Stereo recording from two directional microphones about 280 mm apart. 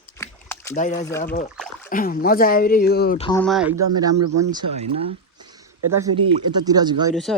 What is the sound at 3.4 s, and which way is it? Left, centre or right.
Speech, centre.